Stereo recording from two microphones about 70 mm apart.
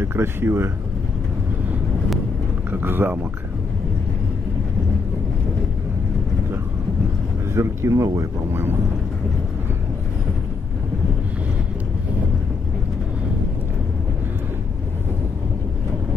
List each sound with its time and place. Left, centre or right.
0.0 s speech: right
2.7 s speech: right
7.5 s speech: right